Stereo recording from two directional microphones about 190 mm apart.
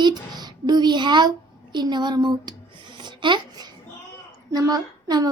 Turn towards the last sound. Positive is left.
turn(degrees=-20)  # may be behind; listen again after turning